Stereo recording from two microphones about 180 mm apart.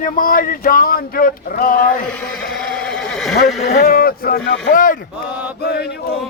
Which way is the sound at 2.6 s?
5° left (ahead or behind).